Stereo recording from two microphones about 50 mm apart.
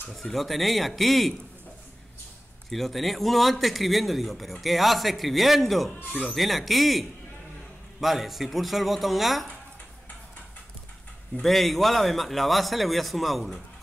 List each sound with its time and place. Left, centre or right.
0.1 s speech: centre
2.7 s speech: centre
11.4 s speech: centre